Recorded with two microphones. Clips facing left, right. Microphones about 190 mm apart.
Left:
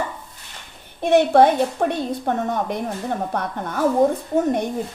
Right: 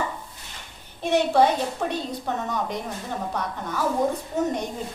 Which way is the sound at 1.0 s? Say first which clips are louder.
Left 5 dB; 55° left (ahead or behind).